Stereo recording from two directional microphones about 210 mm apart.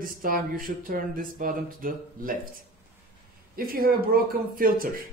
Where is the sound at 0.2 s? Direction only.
40° right (ahead or behind).